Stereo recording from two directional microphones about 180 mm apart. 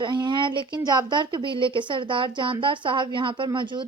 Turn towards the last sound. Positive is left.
turn(degrees=-25)  # may be behind; listen again after turning